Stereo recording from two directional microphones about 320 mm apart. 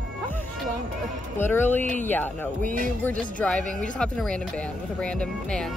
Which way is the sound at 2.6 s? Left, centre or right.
Right.